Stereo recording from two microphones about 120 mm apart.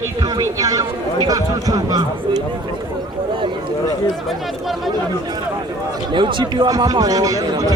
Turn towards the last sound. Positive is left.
turn(degrees=-30)  # may be behind; listen again after turning